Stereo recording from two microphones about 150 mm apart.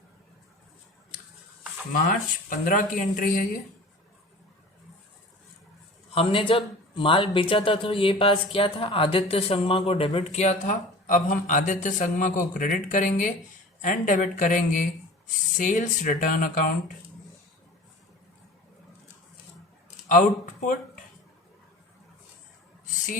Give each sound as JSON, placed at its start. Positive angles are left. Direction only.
{"t": 1.9, "sound": "speech", "side_deg": 65}
{"t": 6.1, "sound": "speech", "side_deg": 35}
{"t": 20.1, "sound": "speech", "side_deg": 60}